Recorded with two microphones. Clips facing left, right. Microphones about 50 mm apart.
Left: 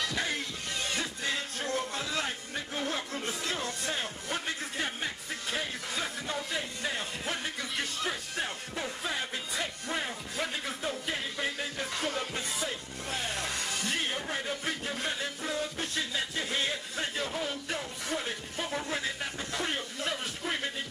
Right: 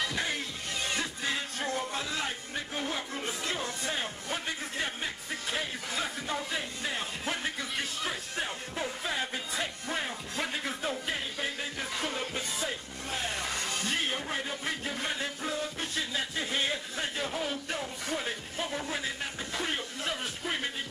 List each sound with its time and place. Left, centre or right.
0.0 s music: centre